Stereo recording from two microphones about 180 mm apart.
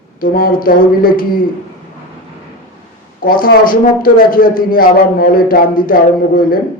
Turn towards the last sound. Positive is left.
turn(degrees=50)  # may be behind; listen again after turning